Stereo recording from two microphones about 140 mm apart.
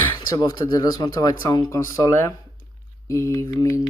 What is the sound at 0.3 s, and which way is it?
Speech, 25° left (ahead or behind).